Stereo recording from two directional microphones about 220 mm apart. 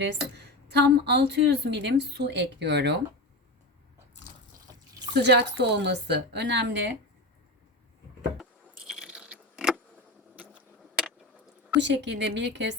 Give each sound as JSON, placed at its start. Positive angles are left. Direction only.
{"t": 0.0, "sound": "a woman's voice", "side_deg": -50}
{"t": 4.9, "sound": "a woman's voice", "side_deg": -50}
{"t": 8.4, "sound": "keys jangling", "side_deg": 0}
{"t": 10.3, "sound": "vehicle", "side_deg": -5}
{"t": 11.8, "sound": "a woman's voice", "side_deg": -55}